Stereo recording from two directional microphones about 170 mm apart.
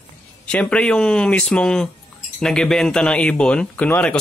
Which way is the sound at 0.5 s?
5° left (ahead or behind).